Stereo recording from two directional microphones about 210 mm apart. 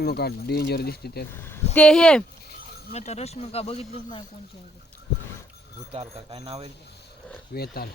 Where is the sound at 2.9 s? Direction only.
30° left (ahead or behind).